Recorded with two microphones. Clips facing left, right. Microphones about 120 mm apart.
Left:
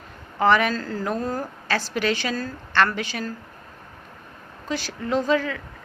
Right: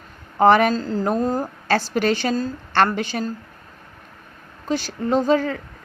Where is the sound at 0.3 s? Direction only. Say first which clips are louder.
Right 5 dB; 45° right (ahead or behind).